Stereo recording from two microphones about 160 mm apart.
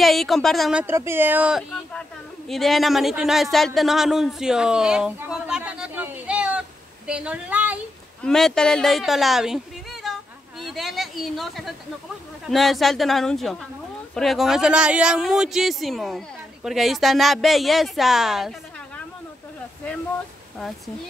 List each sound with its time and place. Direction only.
0.0 s speech: centre (ahead or behind)
0.8 s a woman's voice: 15° right (ahead or behind)
8.2 s speech: centre (ahead or behind)
10.0 s a sound: centre (ahead or behind)
10.6 s speech: centre (ahead or behind)